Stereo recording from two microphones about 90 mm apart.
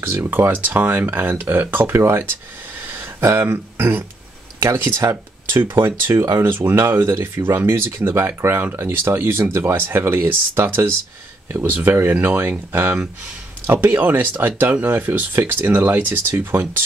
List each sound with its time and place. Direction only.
0.0 s speech: 30° right (ahead or behind)
2.9 s a sound: 20° right (ahead or behind)
3.3 s speech: 30° right (ahead or behind)